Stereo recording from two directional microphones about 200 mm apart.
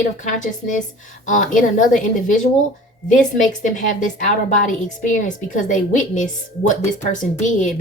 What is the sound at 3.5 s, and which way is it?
Speech, 40° left (ahead or behind).